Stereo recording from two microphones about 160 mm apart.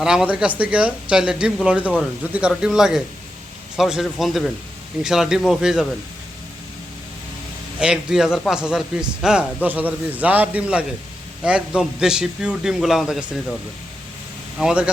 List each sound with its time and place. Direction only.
0.0 s a man's voice: 5° right (ahead or behind)
7.8 s a man's voice: 5° right (ahead or behind)
14.6 s a man's voice: 5° right (ahead or behind)